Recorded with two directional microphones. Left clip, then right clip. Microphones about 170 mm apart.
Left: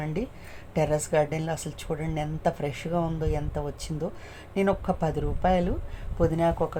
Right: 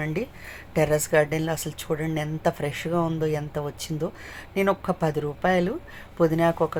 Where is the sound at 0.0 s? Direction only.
10° right (ahead or behind).